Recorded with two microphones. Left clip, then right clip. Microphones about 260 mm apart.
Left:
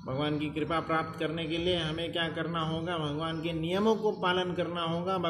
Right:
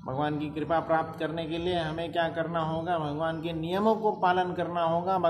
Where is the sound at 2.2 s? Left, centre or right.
Right.